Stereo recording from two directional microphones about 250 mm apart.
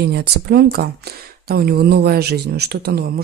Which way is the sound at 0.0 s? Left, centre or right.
Right.